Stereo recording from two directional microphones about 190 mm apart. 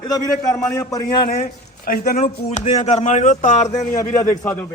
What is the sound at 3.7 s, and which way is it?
Speech, 20° left (ahead or behind).